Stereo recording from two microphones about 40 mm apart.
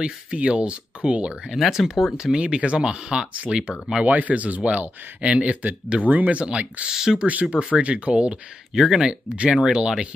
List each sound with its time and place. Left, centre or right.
0.0 s speech: right
1.5 s speech: centre
2.3 s speech: right
4.0 s speech: right
6.8 s speech: centre
7.4 s speech: right
8.7 s speech: centre
9.4 s speech: right